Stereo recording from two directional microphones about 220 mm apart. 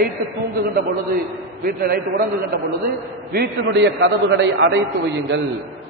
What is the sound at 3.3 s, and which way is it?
A man's voice, 50° right (ahead or behind).